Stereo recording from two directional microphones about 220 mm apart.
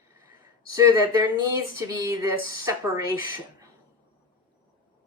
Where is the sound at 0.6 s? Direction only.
15° right (ahead or behind).